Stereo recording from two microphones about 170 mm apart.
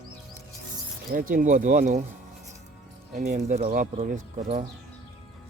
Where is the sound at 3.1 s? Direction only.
45° right (ahead or behind).